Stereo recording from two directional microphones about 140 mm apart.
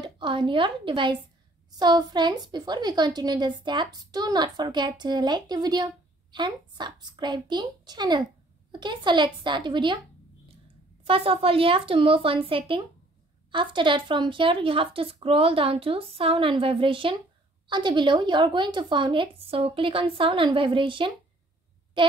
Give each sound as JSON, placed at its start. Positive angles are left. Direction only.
{"t": 0.0, "sound": "a woman's voice", "side_deg": -35}
{"t": 11.1, "sound": "a woman's voice", "side_deg": -40}